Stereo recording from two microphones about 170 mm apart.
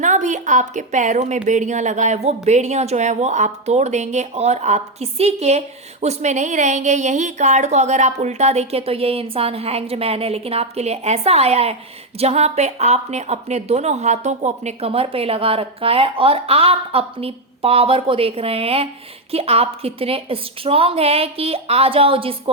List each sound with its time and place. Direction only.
0.0 s a woman's voice: 45° right (ahead or behind)